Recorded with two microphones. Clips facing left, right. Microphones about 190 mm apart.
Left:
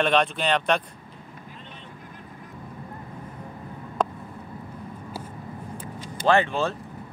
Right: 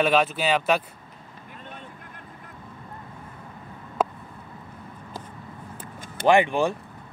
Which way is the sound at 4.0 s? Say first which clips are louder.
Right 1 dB; 5° right (ahead or behind).